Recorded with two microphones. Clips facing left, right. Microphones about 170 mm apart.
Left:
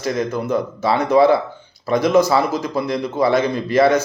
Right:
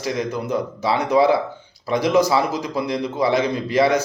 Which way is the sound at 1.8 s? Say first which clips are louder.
Left 3 dB; 50° left (ahead or behind).